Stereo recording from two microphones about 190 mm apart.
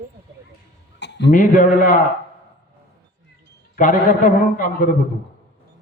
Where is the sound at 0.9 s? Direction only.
65° left (ahead or behind).